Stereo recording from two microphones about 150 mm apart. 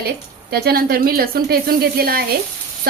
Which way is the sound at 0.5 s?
90° right.